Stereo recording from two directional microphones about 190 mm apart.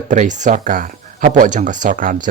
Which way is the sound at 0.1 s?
40° right (ahead or behind).